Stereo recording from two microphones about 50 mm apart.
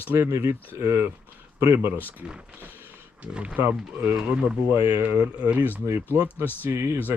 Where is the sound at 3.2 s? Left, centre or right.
Right.